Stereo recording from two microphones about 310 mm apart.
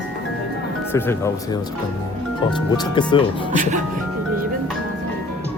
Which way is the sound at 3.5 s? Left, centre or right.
Right.